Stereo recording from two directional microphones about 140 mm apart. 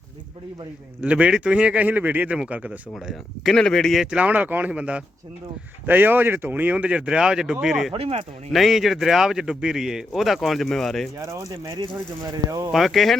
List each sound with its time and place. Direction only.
1.0 s speech: 10° right (ahead or behind)
2.9 s speech: centre (ahead or behind)
7.9 s speech: 45° right (ahead or behind)
8.5 s speech: centre (ahead or behind)
11.2 s speech: 20° right (ahead or behind)
12.7 s speech: centre (ahead or behind)